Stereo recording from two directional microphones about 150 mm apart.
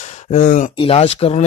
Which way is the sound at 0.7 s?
40° left (ahead or behind).